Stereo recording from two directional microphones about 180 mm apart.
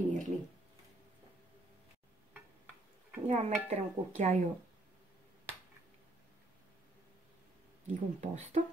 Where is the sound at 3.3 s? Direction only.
40° right (ahead or behind).